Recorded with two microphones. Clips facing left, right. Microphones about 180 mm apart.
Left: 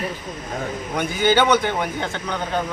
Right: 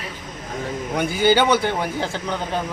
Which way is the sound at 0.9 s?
10° right (ahead or behind).